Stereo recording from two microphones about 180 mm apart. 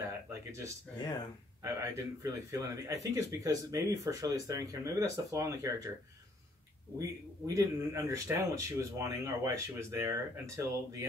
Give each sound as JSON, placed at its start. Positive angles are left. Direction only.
{"t": 0.3, "sound": "a sound", "side_deg": -15}
{"t": 0.9, "sound": "speech", "side_deg": 20}
{"t": 1.6, "sound": "speech", "side_deg": -15}
{"t": 7.0, "sound": "speech", "side_deg": -20}